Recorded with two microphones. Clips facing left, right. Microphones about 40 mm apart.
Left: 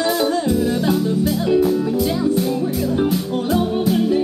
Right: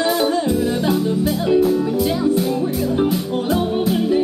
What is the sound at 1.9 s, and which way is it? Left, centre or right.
Music, centre.